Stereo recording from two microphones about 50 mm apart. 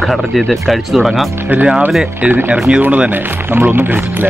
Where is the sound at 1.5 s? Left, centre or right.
Right.